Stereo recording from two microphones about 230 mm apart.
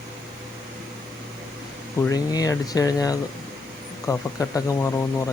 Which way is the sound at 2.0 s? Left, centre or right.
Centre.